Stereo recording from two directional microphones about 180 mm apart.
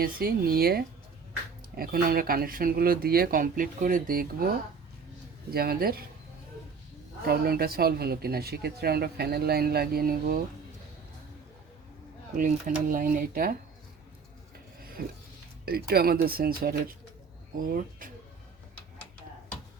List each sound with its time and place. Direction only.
0.0 s speech: 55° right (ahead or behind)
7.3 s speech: 60° right (ahead or behind)
12.9 s speech: 50° right (ahead or behind)
14.8 s filing: 55° right (ahead or behind)
15.6 s speech: 60° right (ahead or behind)